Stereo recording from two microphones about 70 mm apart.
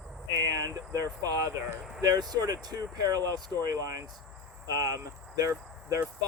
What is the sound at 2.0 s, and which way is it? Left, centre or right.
Speech, right.